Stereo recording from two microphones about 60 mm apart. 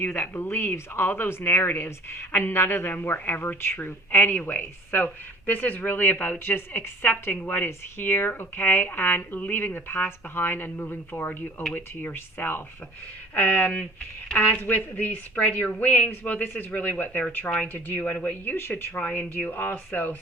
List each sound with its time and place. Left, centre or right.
0.0 s speech: left
18.5 s speech: left
18.9 s speech: left